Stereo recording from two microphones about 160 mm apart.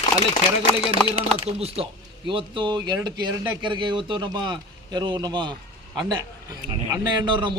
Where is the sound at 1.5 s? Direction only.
40° right (ahead or behind).